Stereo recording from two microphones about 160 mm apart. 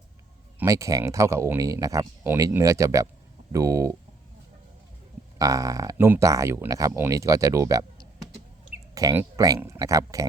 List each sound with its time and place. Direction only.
0.6 s speech: 20° right (ahead or behind)
5.4 s speech: 20° right (ahead or behind)